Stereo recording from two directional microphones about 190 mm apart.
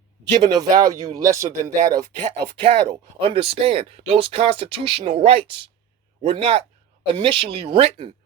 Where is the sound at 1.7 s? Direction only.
40° right (ahead or behind).